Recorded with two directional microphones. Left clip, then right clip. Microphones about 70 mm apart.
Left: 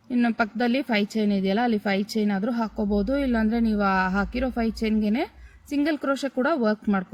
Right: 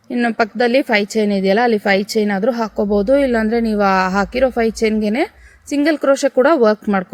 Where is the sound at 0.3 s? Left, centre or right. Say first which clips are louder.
Right 10 dB; right.